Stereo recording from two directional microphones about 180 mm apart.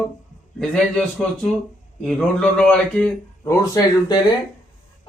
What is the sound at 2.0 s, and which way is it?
A man's voice, 5° left (ahead or behind).